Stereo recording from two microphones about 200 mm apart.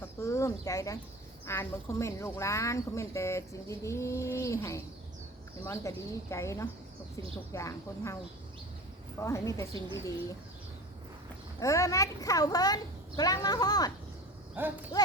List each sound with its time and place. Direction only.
0.0 s bird: 15° left (ahead or behind)
1.5 s speech: 15° left (ahead or behind)
9.2 s speech: 15° left (ahead or behind)
11.6 s speech: 15° left (ahead or behind)
14.5 s speech: 10° right (ahead or behind)